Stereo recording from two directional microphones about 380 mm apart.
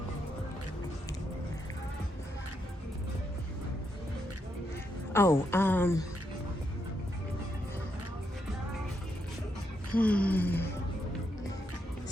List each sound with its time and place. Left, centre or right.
5.1 s speech: centre
9.9 s speech: centre